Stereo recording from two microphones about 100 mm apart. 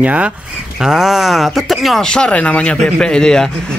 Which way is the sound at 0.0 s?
15° right (ahead or behind).